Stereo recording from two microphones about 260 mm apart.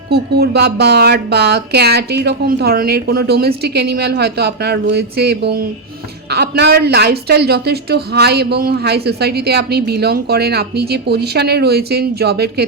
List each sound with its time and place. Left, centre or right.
0.1 s speech: right